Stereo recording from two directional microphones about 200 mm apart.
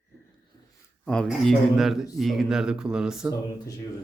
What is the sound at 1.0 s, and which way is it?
A man's voice, 5° left (ahead or behind).